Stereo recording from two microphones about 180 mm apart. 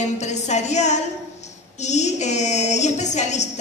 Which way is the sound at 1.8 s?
40° left (ahead or behind).